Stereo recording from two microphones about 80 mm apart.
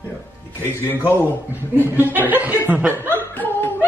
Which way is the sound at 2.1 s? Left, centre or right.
Right.